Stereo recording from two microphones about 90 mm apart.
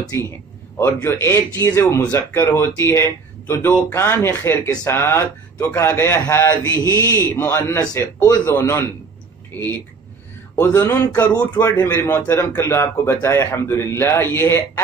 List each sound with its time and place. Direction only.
0.1 s a man's voice: 30° left (ahead or behind)
11.1 s a man's voice: 15° left (ahead or behind)